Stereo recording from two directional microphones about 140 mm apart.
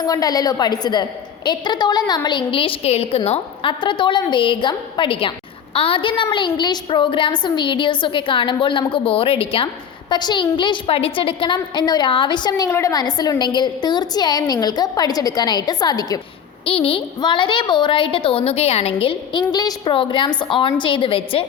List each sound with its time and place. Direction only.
0.0 s a woman's voice: 25° left (ahead or behind)
16.6 s a woman's voice: 40° left (ahead or behind)